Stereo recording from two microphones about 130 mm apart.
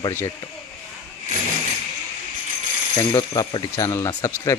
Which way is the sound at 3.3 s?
35° left (ahead or behind).